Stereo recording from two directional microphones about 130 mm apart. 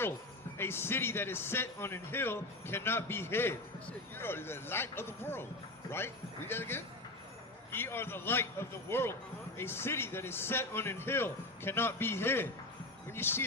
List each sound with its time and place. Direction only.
0.6 s speech: 20° left (ahead or behind)
6.5 s speech: 15° left (ahead or behind)